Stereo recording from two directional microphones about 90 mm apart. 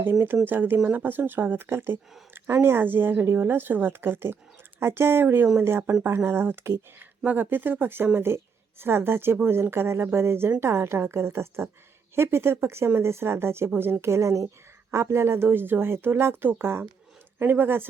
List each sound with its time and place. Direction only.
0.0 s a woman's voice: 25° right (ahead or behind)